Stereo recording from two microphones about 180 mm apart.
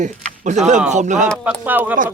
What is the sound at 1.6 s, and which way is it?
Speech, 10° right (ahead or behind).